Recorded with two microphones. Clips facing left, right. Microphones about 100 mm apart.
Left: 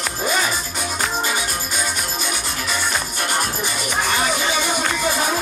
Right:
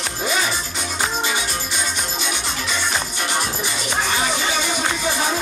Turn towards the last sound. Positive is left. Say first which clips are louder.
# left 1 dB
turn(degrees=15)  # may be behind; listen again after turning